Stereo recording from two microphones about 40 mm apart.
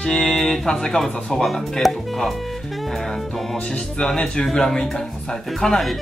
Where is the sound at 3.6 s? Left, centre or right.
Left.